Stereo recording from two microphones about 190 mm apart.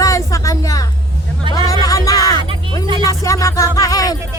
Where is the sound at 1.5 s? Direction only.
25° right (ahead or behind).